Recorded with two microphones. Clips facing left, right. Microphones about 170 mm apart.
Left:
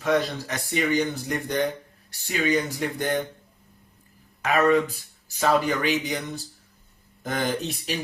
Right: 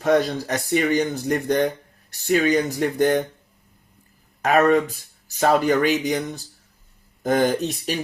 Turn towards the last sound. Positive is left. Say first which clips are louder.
# right 4 dB
turn(degrees=-45)  # may be behind; listen again after turning